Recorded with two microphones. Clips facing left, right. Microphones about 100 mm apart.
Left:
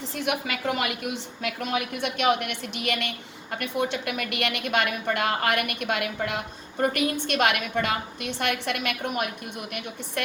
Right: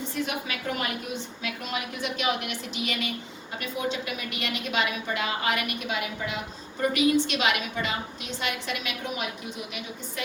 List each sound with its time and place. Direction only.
0.3 s a woman's voice: 80° left; by 10.2 s 55° left (ahead or behind)